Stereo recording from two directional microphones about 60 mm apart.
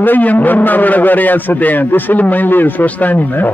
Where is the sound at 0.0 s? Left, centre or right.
Left.